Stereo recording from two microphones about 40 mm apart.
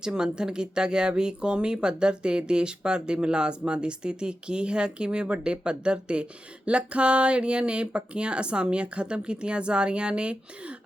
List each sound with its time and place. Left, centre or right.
0.0 s speech: centre